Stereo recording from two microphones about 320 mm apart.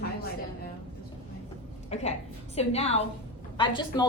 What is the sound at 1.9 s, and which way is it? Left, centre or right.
A woman's voice, centre.